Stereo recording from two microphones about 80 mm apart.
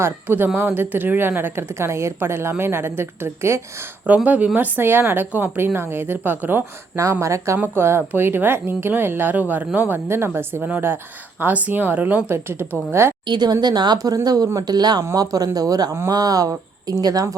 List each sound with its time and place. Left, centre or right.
0.0 s speech: right
4.0 s speech: centre
7.0 s speech: right
13.2 s speech: right
14.6 s speech: right